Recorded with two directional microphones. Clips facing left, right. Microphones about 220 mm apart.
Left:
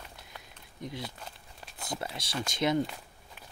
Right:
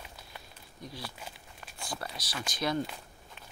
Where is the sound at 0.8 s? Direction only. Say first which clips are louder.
Left 4 dB; 20° left (ahead or behind).